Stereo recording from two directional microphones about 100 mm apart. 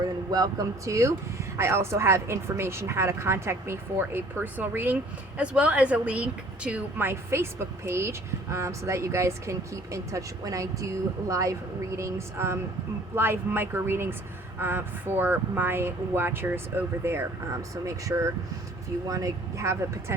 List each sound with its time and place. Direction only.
0.3 s a woman's voice: 40° right (ahead or behind); by 7.1 s 10° right (ahead or behind)
7.1 s a woman's voice: 25° right (ahead or behind)